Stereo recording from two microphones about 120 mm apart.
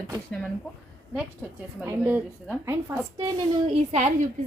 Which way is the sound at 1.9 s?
15° right (ahead or behind).